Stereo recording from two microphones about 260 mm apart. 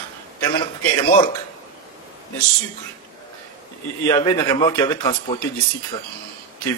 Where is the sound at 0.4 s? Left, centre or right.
Centre.